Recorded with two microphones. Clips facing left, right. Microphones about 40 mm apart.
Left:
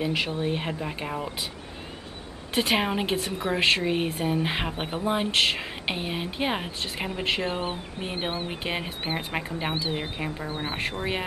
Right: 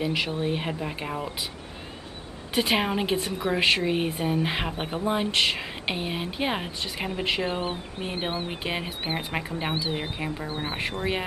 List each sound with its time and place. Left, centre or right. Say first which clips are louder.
0.0 s speech: even; centre
2.5 s speech: even; centre